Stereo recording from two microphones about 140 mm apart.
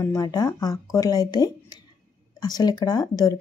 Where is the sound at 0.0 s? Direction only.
25° left (ahead or behind).